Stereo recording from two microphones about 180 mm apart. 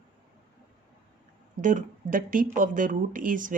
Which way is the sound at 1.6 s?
45° right (ahead or behind).